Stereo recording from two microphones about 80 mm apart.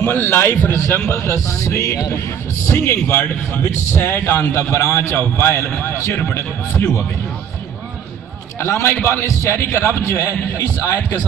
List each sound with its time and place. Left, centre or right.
0.0 s speech: left
1.0 s a man's voice: left
2.7 s a man's voice: left
8.5 s a man's voice: left